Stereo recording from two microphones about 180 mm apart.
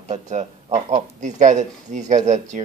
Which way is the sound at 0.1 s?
40° right (ahead or behind).